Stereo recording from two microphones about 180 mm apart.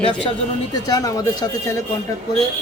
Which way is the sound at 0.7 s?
20° left (ahead or behind).